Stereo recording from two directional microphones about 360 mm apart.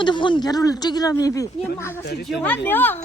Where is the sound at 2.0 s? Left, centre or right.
Left.